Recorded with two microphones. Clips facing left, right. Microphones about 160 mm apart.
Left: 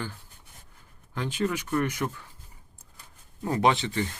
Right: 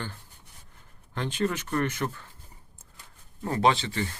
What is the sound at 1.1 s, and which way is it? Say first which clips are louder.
Speech: even; 10° left (ahead or behind).